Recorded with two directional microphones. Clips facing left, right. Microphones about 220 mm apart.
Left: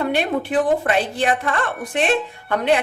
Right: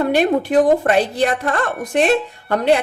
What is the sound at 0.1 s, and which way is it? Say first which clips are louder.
A woman's voice: right 5 dB; 40° right (ahead or behind).